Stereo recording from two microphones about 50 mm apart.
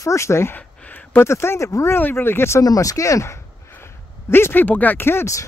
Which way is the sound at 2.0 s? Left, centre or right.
Left.